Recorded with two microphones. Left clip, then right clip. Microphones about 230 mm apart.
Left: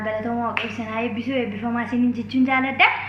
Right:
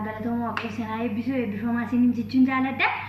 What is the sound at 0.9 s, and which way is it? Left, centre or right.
A woman's voice, centre.